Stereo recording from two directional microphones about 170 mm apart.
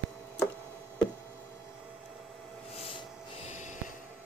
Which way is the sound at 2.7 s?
35° left (ahead or behind).